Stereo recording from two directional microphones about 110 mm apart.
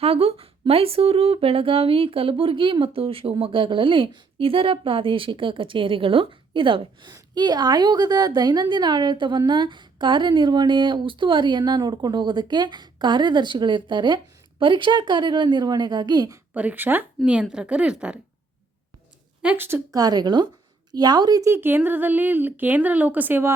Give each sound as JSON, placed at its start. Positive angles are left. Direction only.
{"t": 0.0, "sound": "a woman's voice", "side_deg": -65}
{"t": 16.6, "sound": "speech", "side_deg": -15}
{"t": 19.4, "sound": "speech", "side_deg": -15}
{"t": 19.9, "sound": "speech", "side_deg": -35}
{"t": 21.5, "sound": "speech", "side_deg": -20}